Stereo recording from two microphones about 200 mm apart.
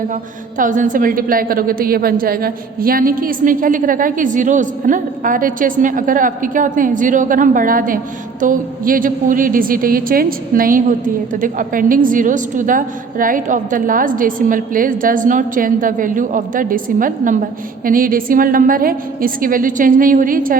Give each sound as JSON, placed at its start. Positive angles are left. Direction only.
{"t": 0.6, "sound": "a woman's voice", "side_deg": -40}